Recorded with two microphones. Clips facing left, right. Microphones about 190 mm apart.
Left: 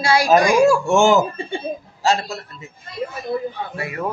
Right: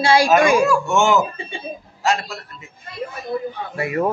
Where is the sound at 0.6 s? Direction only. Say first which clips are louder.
Left 3 dB; 30° left (ahead or behind).